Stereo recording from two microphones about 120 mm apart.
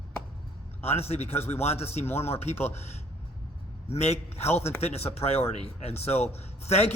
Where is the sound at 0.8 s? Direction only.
60° left (ahead or behind).